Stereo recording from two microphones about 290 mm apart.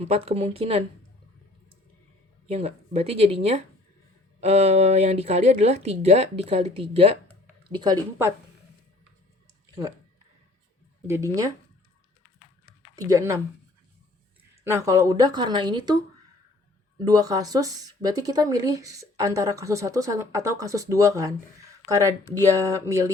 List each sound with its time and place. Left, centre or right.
0.1 s speech: right
2.5 s speech: right
11.0 s speech: centre
13.0 s speech: centre
14.6 s speech: centre